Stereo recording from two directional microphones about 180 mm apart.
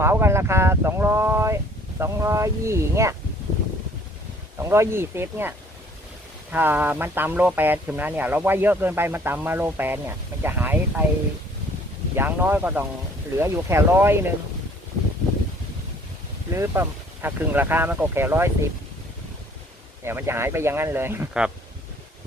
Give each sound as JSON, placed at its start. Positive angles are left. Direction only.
{"t": 0.0, "sound": "speech", "side_deg": -15}
{"t": 4.6, "sound": "speech", "side_deg": -15}
{"t": 12.1, "sound": "speech", "side_deg": -10}
{"t": 16.5, "sound": "speech", "side_deg": -15}
{"t": 20.1, "sound": "speech", "side_deg": -15}